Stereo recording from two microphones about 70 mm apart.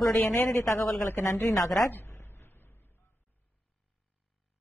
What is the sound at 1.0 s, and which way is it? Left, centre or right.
Speech, left.